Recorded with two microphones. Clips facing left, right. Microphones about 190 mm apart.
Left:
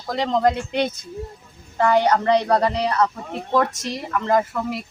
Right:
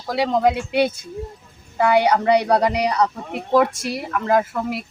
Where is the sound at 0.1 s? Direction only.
10° right (ahead or behind).